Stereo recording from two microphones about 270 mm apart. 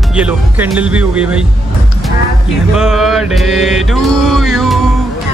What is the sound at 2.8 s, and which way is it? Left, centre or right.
Speech, centre.